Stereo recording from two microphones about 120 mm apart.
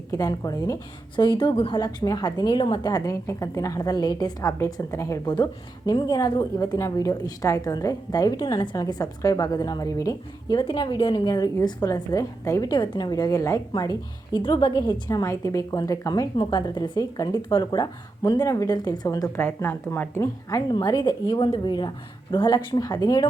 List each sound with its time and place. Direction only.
0.1 s a woman's voice: 30° left (ahead or behind)
10.6 s a woman's voice: 40° left (ahead or behind)
12.7 s a woman's voice: 40° left (ahead or behind)
14.4 s a woman's voice: 45° left (ahead or behind)
15.2 s a woman's voice: 25° left (ahead or behind)
20.7 s a woman's voice: 35° left (ahead or behind)